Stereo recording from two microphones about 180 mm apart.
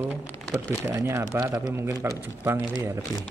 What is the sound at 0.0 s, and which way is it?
Speech, centre (ahead or behind).